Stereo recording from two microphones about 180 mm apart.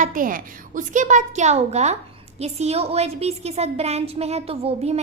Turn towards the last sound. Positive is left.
turn(degrees=-35)  # may be behind; listen again after turning